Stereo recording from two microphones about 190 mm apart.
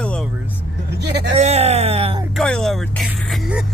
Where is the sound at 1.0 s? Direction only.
60° right (ahead or behind).